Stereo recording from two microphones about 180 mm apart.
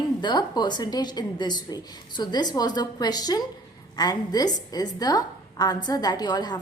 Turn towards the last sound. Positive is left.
turn(degrees=25)  # may be behind; listen again after turning